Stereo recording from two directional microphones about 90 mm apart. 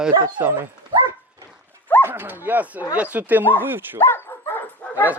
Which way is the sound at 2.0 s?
25° right (ahead or behind).